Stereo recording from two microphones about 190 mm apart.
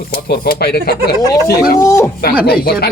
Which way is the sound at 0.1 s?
55° left (ahead or behind).